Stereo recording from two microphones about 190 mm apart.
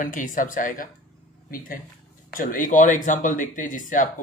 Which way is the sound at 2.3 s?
45° left (ahead or behind).